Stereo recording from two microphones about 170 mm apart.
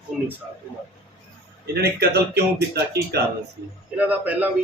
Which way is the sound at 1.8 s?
70° right (ahead or behind).